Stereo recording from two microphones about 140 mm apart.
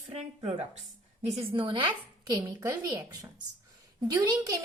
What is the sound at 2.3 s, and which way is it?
A woman's voice, 25° right (ahead or behind).